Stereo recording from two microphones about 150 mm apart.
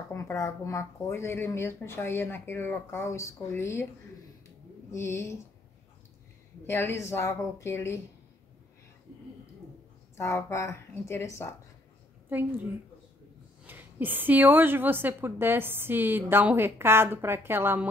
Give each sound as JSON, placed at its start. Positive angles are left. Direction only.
{"t": 0.1, "sound": "speech", "side_deg": 20}
{"t": 4.9, "sound": "speech", "side_deg": 20}
{"t": 6.6, "sound": "speech", "side_deg": 20}
{"t": 10.1, "sound": "a woman's voice", "side_deg": 20}
{"t": 12.3, "sound": "a woman's voice", "side_deg": -10}
{"t": 13.7, "sound": "a woman's voice", "side_deg": -10}